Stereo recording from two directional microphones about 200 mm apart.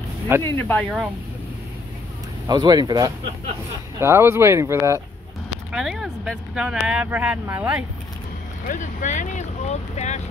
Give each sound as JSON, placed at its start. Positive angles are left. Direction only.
{"t": 0.4, "sound": "speech", "side_deg": 10}
{"t": 2.4, "sound": "speech", "side_deg": -20}
{"t": 8.6, "sound": "speech", "side_deg": 40}